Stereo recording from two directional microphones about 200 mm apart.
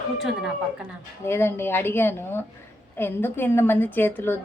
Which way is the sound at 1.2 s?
10° left (ahead or behind).